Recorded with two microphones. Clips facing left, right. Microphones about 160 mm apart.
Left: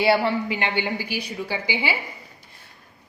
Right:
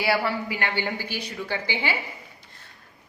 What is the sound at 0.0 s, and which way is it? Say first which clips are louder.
A woman's voice: left 5 dB; 25° left (ahead or behind).